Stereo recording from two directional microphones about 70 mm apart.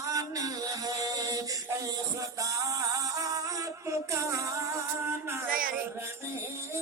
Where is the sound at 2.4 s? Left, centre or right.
Right.